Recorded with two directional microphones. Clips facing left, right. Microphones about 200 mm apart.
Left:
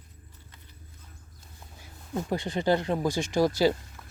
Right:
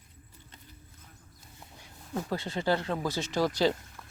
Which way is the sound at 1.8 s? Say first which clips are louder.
Left 2 dB; 15° left (ahead or behind).